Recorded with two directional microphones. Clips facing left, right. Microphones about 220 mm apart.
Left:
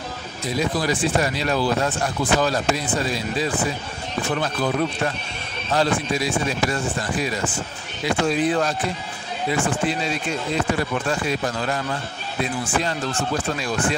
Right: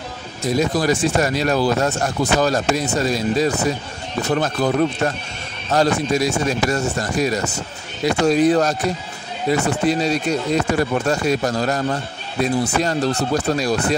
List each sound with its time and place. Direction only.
0.5 s speech: 45° right (ahead or behind)